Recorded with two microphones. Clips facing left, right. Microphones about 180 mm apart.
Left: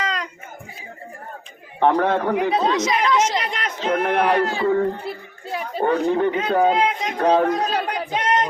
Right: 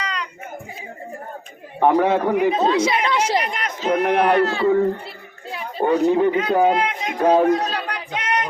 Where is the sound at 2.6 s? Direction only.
30° right (ahead or behind).